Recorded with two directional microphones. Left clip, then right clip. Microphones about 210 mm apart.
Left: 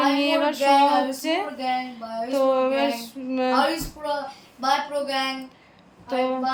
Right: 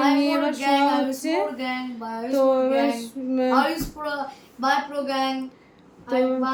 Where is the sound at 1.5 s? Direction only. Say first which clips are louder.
Left 3 dB; 45° right (ahead or behind).